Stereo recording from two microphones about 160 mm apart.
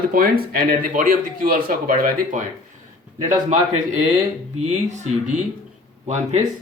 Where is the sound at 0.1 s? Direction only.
65° right (ahead or behind).